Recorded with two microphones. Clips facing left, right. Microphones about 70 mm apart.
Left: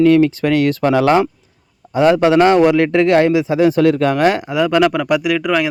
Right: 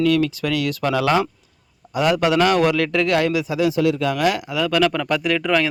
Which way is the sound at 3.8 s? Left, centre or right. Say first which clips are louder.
Left 6 dB; left.